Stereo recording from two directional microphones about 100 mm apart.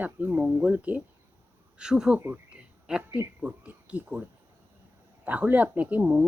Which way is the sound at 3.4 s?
15° right (ahead or behind).